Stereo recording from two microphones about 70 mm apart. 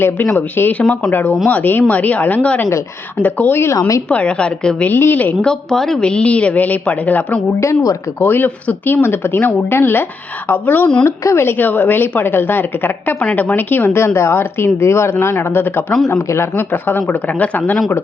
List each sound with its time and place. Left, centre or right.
0.3 s speech: left
3.8 s speech: left
4.1 s a woman's voice: centre
4.9 s speech: left
5.5 s a woman's voice: centre; by 10.8 s left
11.0 s speech: left
11.4 s a woman's voice: left